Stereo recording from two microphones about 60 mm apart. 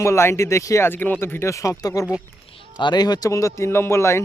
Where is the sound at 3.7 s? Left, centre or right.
Left.